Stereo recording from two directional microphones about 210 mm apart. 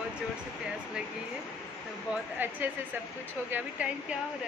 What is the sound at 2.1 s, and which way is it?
A woman's voice, 10° right (ahead or behind).